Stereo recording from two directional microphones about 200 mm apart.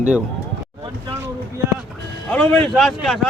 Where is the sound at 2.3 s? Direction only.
5° left (ahead or behind).